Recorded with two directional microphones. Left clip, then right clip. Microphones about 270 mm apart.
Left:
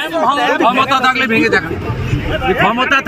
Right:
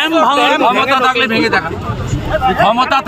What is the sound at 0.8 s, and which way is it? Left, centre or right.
Speech, centre.